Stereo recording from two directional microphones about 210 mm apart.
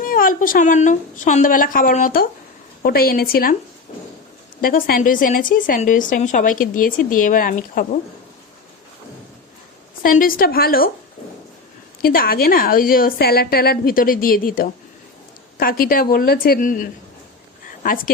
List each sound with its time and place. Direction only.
0.0 s a woman's voice: 40° left (ahead or behind)
4.6 s a woman's voice: 40° left (ahead or behind)
10.0 s a woman's voice: 40° left (ahead or behind)
12.0 s a woman's voice: 45° left (ahead or behind)